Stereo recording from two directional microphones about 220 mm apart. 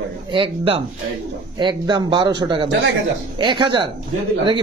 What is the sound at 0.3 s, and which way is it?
A man's voice, 25° right (ahead or behind).